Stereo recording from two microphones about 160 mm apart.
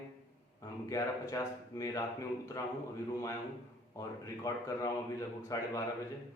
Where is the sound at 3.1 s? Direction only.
20° left (ahead or behind).